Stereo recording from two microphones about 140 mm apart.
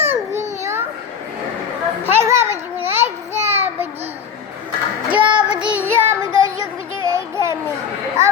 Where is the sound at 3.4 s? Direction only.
50° right (ahead or behind).